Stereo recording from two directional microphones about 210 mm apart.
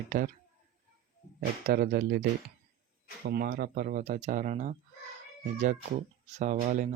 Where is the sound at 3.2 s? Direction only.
45° right (ahead or behind).